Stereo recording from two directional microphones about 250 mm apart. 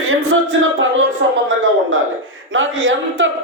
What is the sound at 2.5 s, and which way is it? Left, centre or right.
Speech, right.